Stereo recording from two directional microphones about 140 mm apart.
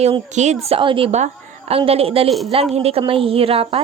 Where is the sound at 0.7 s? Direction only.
40° right (ahead or behind).